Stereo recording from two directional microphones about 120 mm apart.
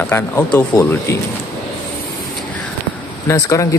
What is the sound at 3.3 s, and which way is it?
Speech, 25° left (ahead or behind).